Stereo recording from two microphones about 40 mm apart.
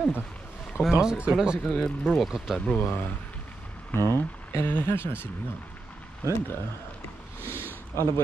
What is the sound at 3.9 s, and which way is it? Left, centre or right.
Speech, left.